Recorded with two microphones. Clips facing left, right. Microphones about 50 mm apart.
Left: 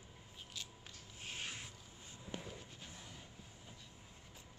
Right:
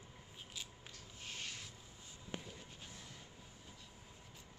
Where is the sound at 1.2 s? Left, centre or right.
Left.